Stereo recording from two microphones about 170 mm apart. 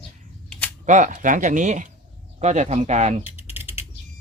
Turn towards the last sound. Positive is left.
turn(degrees=-10)  # may be behind; listen again after turning